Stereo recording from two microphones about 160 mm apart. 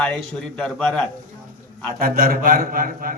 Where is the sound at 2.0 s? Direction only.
70° right (ahead or behind).